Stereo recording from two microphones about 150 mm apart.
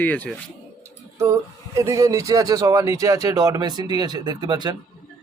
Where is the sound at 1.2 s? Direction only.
20° right (ahead or behind).